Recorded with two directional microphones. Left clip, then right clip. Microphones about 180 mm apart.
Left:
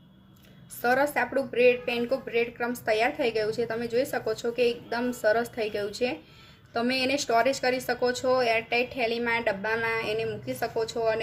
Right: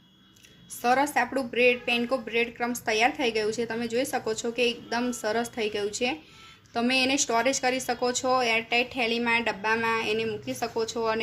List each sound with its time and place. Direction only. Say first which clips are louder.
0.8 s a woman's voice: right 1 dB; 20° right (ahead or behind)